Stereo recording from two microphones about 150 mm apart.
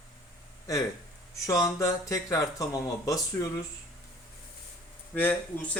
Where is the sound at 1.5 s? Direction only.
20° left (ahead or behind).